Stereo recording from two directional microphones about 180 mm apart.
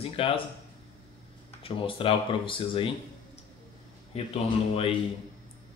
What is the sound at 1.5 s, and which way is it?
Speech, 30° left (ahead or behind).